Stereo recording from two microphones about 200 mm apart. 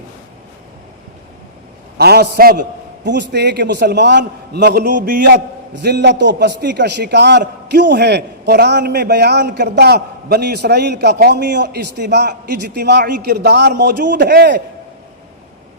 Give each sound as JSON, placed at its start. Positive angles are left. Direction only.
{"t": 2.0, "sound": "a man's voice", "side_deg": -55}
{"t": 5.7, "sound": "a man's voice", "side_deg": -55}